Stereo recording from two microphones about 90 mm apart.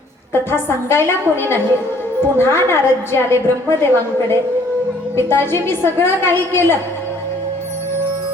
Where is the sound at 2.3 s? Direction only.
30° left (ahead or behind).